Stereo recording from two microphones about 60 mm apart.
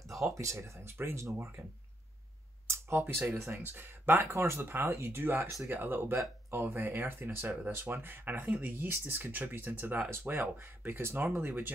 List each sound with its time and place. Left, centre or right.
0.2 s speech: right
2.7 s speech: right
3.5 s speech: right
4.3 s speech: right